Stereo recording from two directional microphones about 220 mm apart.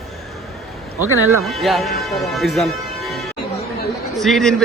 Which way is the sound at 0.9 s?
15° left (ahead or behind).